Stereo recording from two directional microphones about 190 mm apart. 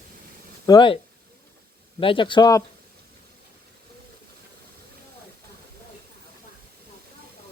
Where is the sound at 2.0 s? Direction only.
25° left (ahead or behind).